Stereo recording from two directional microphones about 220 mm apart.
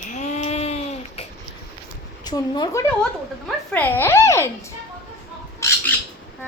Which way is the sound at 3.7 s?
10° left (ahead or behind).